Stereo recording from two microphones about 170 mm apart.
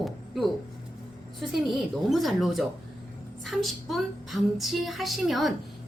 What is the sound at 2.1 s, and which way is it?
A woman's voice, centre (ahead or behind).